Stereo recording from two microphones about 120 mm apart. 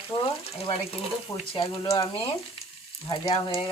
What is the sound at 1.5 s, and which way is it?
Speech, 45° left (ahead or behind).